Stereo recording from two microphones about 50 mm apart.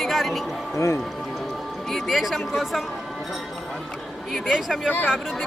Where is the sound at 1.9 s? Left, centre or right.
Centre.